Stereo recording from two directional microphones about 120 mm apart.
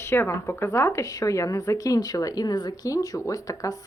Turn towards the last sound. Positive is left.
turn(degrees=25)  # may be behind; listen again after turning